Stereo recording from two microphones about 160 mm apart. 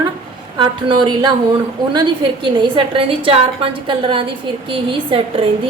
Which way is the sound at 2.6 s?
35° right (ahead or behind).